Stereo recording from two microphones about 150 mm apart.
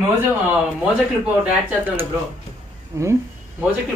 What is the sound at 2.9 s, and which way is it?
Speech, 20° right (ahead or behind).